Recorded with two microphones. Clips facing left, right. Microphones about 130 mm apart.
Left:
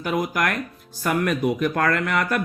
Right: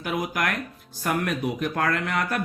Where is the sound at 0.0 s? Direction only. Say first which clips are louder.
Left 4 dB; 50° left (ahead or behind).